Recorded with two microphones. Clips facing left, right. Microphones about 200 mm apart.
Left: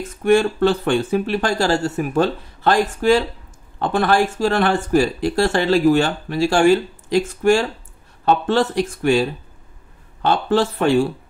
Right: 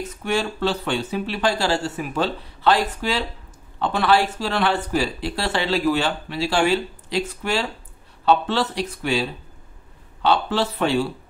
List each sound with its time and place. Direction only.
0.0 s speech: 50° left (ahead or behind)